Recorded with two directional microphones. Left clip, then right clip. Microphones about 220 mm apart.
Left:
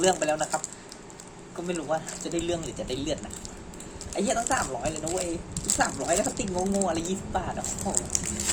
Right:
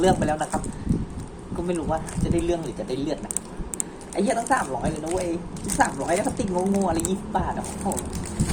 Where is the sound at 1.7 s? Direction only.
5° left (ahead or behind).